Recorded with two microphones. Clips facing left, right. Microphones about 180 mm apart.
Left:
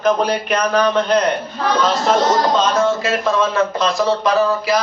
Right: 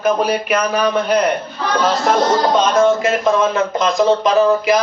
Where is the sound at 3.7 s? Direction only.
20° right (ahead or behind).